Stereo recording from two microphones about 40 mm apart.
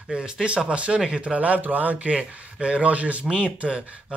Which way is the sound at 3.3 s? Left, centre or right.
Right.